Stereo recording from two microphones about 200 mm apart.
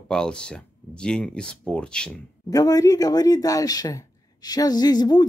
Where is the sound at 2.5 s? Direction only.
20° left (ahead or behind).